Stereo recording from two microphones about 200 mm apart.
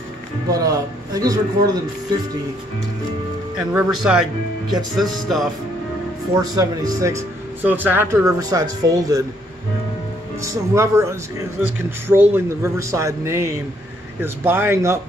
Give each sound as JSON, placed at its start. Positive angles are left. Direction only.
{"t": 0.5, "sound": "speech", "side_deg": -15}
{"t": 3.7, "sound": "speech", "side_deg": -5}
{"t": 6.3, "sound": "speech", "side_deg": -20}
{"t": 10.4, "sound": "speech", "side_deg": -15}